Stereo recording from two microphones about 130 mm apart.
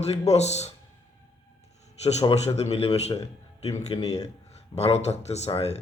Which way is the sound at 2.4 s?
55° left (ahead or behind).